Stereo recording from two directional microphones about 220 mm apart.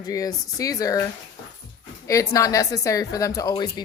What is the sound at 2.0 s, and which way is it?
Speech, 15° left (ahead or behind).